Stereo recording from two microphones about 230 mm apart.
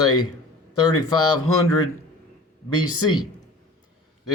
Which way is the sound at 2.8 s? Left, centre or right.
Centre.